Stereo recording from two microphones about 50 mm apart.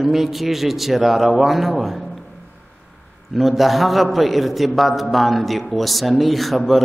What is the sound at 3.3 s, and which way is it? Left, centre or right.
A man's voice, centre.